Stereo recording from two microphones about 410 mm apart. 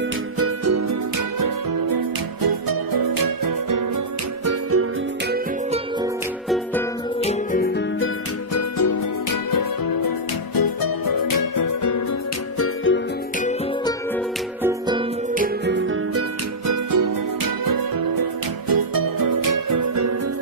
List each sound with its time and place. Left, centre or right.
0.4 s music: right
4.5 s music: right
7.2 s music: centre
8.5 s music: left
12.5 s music: left
14.6 s music: centre; by 16.3 s right
16.6 s music: right
18.7 s music: right